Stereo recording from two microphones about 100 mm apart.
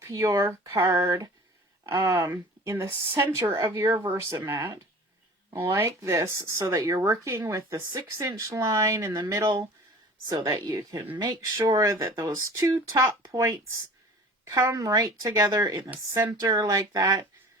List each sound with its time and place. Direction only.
0.1 s speech: 35° right (ahead or behind)
0.6 s a sound: 45° right (ahead or behind)
1.9 s speech: 30° right (ahead or behind)